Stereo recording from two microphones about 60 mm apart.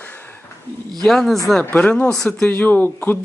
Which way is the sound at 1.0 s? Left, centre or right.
Centre.